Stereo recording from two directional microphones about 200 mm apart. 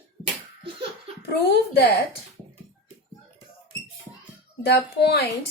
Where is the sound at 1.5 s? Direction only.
55° left (ahead or behind).